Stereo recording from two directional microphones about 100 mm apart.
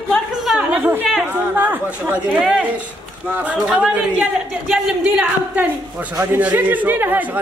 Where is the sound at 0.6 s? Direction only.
15° right (ahead or behind).